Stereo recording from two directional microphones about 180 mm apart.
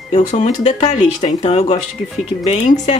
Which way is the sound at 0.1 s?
40° left (ahead or behind).